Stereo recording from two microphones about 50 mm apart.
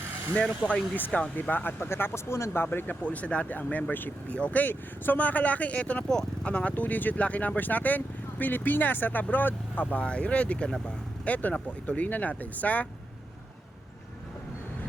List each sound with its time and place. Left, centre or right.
0.9 s speech: left
2.6 s speech: left
4.4 s speech: left
4.6 s speech: left
6.1 s speech: centre
6.5 s speech: left
9.8 s speech: left